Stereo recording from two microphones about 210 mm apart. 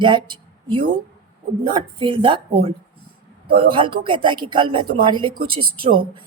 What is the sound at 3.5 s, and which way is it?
A woman's voice, 25° right (ahead or behind).